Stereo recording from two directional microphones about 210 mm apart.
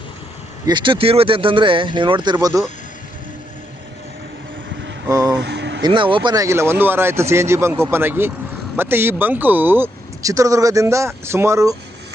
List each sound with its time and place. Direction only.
0.6 s speech: 20° right (ahead or behind)
5.0 s speech: 15° right (ahead or behind)
5.4 s a sound: 55° right (ahead or behind)
5.8 s speech: 25° right (ahead or behind)